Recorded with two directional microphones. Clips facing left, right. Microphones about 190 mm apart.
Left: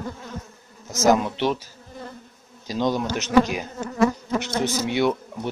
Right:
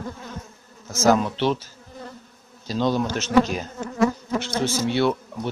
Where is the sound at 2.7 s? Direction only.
15° left (ahead or behind).